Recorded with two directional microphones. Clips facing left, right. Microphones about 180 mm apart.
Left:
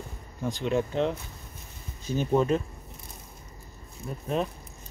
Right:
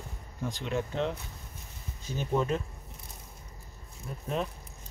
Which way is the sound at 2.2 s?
30° left (ahead or behind).